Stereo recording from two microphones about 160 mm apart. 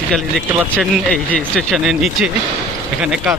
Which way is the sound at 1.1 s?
5° left (ahead or behind).